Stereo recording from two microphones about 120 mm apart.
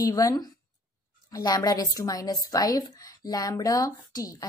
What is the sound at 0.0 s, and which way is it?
Speech, 30° left (ahead or behind).